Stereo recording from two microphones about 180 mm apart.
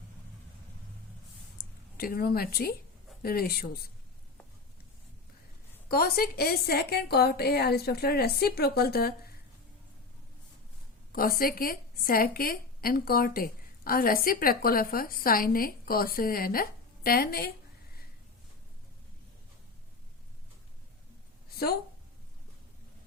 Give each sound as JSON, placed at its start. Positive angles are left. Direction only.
{"t": 1.5, "sound": "a woman's voice", "side_deg": 55}
{"t": 5.9, "sound": "a woman's voice", "side_deg": 55}
{"t": 11.1, "sound": "a woman's voice", "side_deg": 55}